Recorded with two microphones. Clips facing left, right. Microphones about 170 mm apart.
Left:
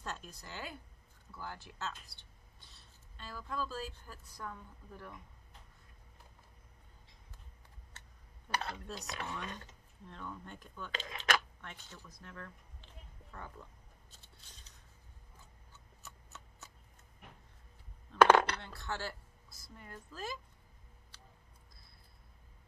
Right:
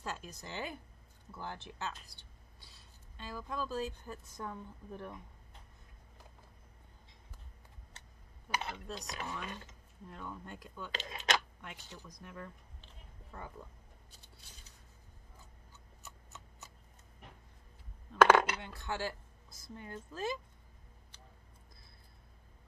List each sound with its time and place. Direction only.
0.0 s a sound: 10° right (ahead or behind)
1.3 s speech: 20° right (ahead or behind)
8.5 s speech: 5° right (ahead or behind)
8.9 s a woman's voice: 15° right (ahead or behind)
10.9 s speech: 25° right (ahead or behind)
11.6 s a woman's voice: 15° right (ahead or behind)
18.4 s speech: 10° right (ahead or behind)